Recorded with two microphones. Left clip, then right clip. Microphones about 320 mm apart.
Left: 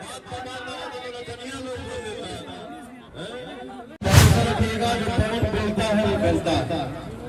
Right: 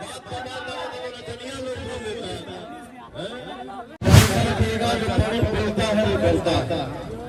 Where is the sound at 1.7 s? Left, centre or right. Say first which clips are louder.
Right 2 dB; centre.